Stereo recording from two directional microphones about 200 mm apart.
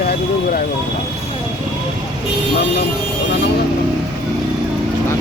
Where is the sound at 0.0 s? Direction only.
50° left (ahead or behind).